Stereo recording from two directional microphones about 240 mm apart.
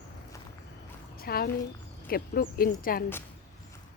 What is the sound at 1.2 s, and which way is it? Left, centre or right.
Speech, left.